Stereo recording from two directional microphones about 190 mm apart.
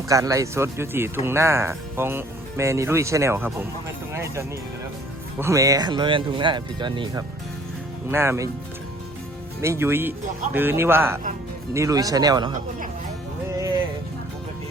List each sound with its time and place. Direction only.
0.1 s speech: 15° right (ahead or behind)
9.6 s speech: 15° right (ahead or behind)